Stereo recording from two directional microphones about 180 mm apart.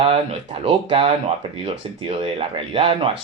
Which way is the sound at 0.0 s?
30° right (ahead or behind).